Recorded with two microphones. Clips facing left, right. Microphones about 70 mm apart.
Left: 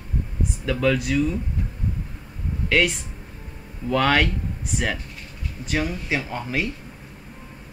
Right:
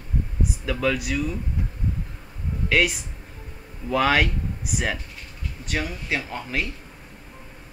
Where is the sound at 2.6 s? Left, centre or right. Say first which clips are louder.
Left 1 dB; centre.